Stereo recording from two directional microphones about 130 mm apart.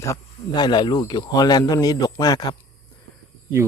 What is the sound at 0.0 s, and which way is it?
Speech, 30° left (ahead or behind).